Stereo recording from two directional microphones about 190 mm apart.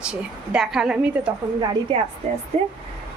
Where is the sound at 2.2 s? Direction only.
35° right (ahead or behind).